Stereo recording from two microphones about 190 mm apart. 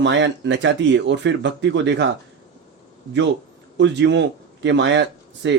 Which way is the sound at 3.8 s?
70° right (ahead or behind).